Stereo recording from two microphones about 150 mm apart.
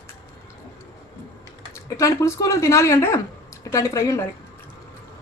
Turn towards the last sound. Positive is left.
turn(degrees=20)  # may be behind; listen again after turning